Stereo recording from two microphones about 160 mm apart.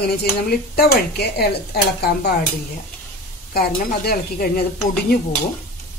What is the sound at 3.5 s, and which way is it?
Speech, 75° left (ahead or behind).